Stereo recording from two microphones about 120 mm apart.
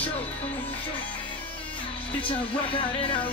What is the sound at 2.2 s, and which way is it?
Speech, 45° left (ahead or behind).